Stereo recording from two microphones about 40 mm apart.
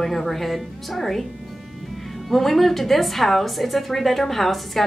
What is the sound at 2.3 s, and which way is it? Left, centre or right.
A woman's voice, centre.